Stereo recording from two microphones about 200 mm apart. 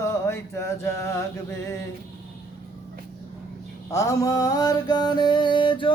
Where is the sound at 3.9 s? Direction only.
15° left (ahead or behind).